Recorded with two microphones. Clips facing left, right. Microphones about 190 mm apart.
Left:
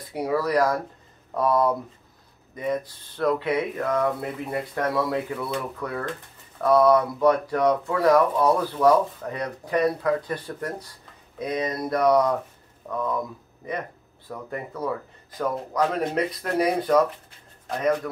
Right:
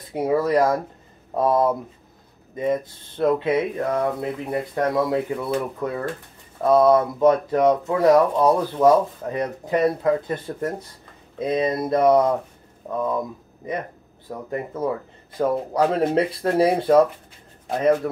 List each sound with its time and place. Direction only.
0.1 s speech: 25° right (ahead or behind)